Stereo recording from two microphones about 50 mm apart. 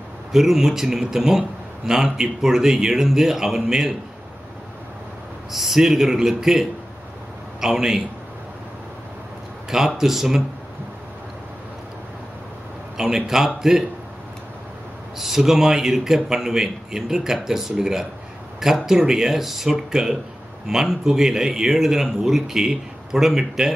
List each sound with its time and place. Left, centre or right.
0.3 s a man's voice: centre
5.5 s a man's voice: centre
9.7 s a man's voice: centre
12.9 s a man's voice: centre
15.1 s a man's voice: centre